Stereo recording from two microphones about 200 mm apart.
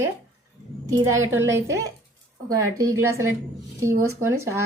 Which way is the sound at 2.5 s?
15° right (ahead or behind).